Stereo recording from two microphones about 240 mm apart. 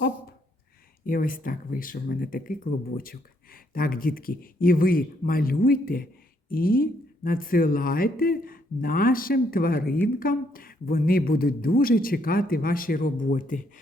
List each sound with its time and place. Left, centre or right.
1.0 s speech: left